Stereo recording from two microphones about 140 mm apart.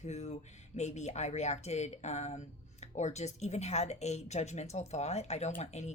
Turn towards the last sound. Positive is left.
turn(degrees=55)  # may be behind; listen again after turning